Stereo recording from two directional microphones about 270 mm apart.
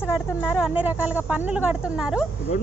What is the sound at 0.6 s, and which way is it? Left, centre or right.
Speech, centre.